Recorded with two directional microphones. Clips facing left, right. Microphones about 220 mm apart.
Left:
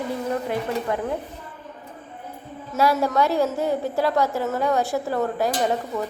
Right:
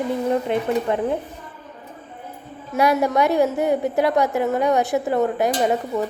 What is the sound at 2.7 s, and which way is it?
A woman's voice, 15° right (ahead or behind).